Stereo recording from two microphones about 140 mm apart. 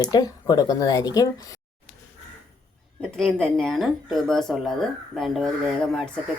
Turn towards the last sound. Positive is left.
turn(degrees=5)  # may be behind; listen again after turning